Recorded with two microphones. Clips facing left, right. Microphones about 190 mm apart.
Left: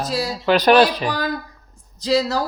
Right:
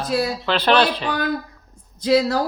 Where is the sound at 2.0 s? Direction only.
55° right (ahead or behind).